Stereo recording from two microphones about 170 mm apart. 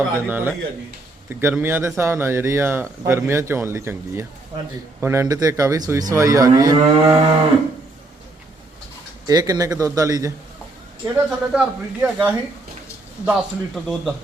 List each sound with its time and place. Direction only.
0.3 s speech: 10° right (ahead or behind)
9.2 s speech: 20° right (ahead or behind)
11.0 s a man's voice: 5° right (ahead or behind)